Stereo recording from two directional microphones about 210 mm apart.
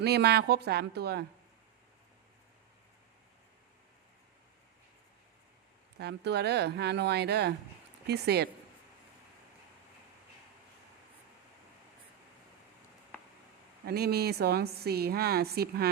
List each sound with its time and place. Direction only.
0.0 s a woman's voice: 50° right (ahead or behind)
6.0 s a woman's voice: 50° right (ahead or behind)
13.8 s a woman's voice: 50° right (ahead or behind)